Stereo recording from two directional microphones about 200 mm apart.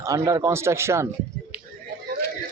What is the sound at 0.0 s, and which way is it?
Speech, 15° right (ahead or behind).